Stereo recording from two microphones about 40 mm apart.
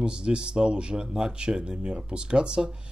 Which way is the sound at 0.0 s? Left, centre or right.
Right.